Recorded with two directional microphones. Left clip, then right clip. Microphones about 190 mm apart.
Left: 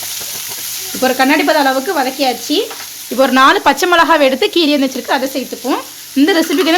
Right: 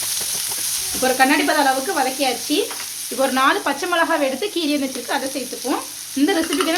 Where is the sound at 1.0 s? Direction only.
45° left (ahead or behind).